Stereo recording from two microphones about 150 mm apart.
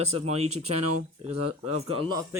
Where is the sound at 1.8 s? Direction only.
40° right (ahead or behind).